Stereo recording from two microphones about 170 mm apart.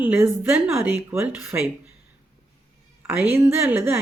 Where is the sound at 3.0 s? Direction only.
10° right (ahead or behind).